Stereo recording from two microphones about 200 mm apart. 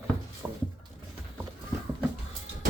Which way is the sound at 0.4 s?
10° right (ahead or behind).